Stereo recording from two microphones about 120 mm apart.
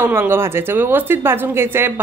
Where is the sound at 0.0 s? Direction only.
20° right (ahead or behind).